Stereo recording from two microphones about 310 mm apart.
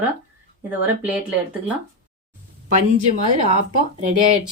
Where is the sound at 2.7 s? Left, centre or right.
Right.